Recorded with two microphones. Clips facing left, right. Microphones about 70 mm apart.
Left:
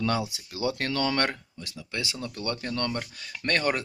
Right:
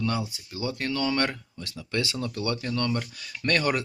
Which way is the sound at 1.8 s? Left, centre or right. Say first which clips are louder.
Right 5 dB; centre.